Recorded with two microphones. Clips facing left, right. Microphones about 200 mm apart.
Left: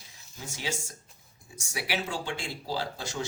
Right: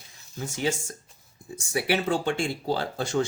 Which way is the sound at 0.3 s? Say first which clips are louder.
Right 8 dB; 55° right (ahead or behind).